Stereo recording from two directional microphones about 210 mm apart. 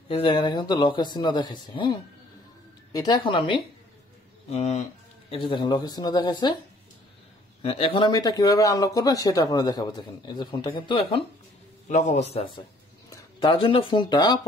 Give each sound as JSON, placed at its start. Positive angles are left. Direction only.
{"t": 0.1, "sound": "a man's voice", "side_deg": 25}
{"t": 7.6, "sound": "a man's voice", "side_deg": 25}